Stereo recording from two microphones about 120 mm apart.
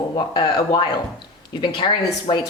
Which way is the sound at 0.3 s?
40° left (ahead or behind).